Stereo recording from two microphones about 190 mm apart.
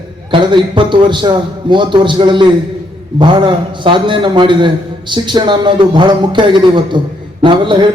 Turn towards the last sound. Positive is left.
turn(degrees=-25)  # may be behind; listen again after turning